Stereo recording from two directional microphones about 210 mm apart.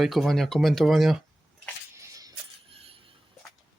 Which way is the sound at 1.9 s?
15° right (ahead or behind).